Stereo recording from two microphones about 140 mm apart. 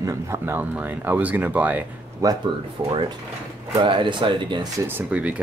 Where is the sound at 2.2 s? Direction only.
25° right (ahead or behind).